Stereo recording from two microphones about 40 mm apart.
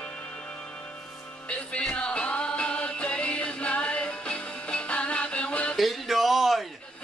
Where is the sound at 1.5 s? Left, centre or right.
Left.